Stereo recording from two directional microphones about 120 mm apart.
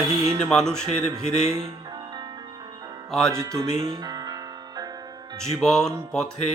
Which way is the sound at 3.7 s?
50° right (ahead or behind).